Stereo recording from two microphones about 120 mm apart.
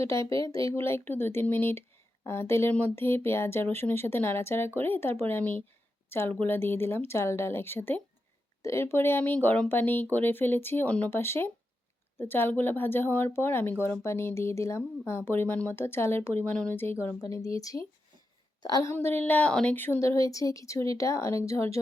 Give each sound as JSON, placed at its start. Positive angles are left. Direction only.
{"t": 0.6, "sound": "a woman's voice", "side_deg": 20}